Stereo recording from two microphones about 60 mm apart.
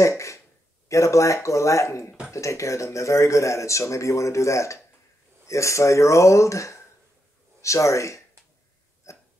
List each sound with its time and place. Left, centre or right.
0.0 s a sound: left
0.8 s speech: left
9.1 s hiccup: left